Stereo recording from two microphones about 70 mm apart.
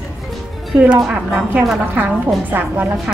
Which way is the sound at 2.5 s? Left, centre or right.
Right.